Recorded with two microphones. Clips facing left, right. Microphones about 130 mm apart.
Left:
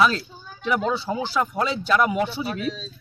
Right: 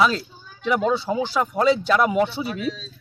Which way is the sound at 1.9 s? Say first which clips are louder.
Right 2 dB; 25° right (ahead or behind).